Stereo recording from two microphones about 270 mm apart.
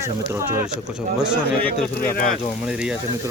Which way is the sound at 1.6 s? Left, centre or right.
Left.